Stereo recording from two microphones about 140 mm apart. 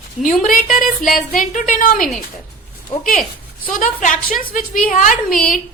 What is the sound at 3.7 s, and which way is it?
A woman's voice, 70° left (ahead or behind).